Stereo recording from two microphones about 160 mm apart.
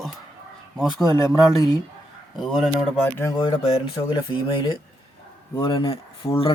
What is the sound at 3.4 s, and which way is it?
Speech, 35° left (ahead or behind).